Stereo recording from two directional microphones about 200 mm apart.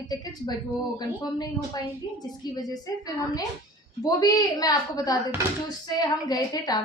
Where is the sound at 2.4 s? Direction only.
20° left (ahead or behind).